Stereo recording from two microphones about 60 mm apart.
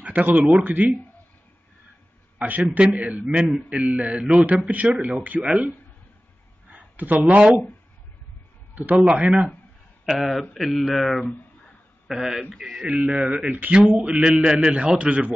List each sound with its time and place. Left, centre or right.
0.0 s a man's voice: right
2.3 s a man's voice: right
3.4 s speech: centre
3.8 s a man's voice: right
4.9 s a man's voice: centre
6.7 s a sound: right
8.7 s a man's voice: right
10.0 s speech: centre
12.8 s a man's voice: right